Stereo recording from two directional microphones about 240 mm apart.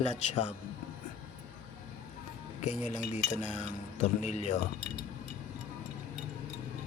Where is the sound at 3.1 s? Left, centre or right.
Left.